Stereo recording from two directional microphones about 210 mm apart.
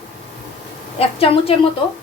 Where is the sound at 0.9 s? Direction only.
30° left (ahead or behind).